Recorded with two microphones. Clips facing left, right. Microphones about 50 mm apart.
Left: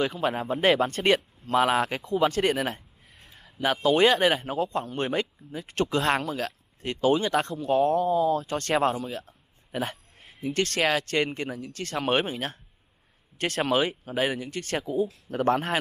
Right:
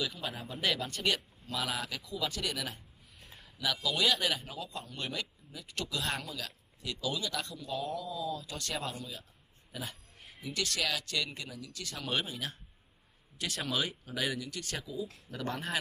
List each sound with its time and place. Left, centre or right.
0.0 s speech: left
13.7 s speech: left